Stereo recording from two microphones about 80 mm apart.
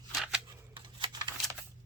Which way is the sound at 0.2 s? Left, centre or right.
Centre.